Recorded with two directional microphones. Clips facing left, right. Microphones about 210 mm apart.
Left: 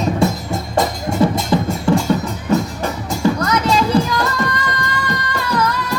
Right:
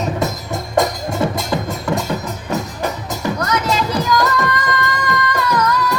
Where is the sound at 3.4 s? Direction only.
30° left (ahead or behind).